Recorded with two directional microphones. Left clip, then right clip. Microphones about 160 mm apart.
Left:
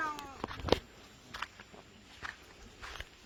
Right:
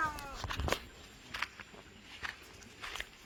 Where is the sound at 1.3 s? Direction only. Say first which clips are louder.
Right 3 dB; 75° right (ahead or behind).